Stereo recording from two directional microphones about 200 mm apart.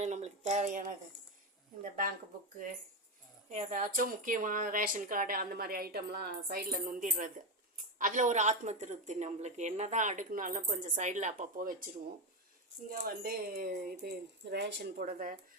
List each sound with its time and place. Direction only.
0.0 s a woman's voice: 35° right (ahead or behind)
3.5 s a woman's voice: 40° right (ahead or behind)
12.9 s a woman's voice: 50° right (ahead or behind)